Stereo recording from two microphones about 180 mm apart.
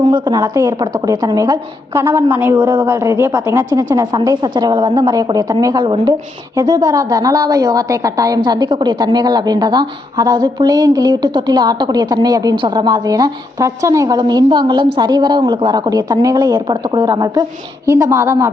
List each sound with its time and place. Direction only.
0.0 s a woman's voice: 20° right (ahead or behind)